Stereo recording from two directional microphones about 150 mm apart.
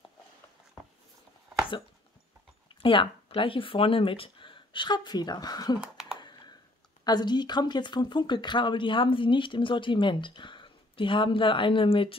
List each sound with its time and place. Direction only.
2.7 s speech: 35° left (ahead or behind)
6.1 s a sound: 30° left (ahead or behind)
7.1 s speech: 30° left (ahead or behind)